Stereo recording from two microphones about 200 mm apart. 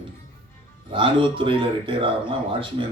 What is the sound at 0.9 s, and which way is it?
A man's voice, 25° right (ahead or behind).